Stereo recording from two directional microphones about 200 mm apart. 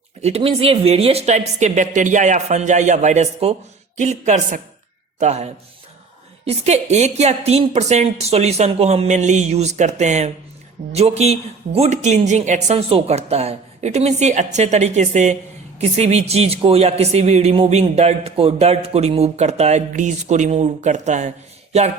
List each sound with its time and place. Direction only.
0.2 s speech: 30° right (ahead or behind)